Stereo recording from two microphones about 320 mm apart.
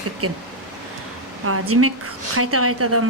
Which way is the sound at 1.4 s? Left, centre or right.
Right.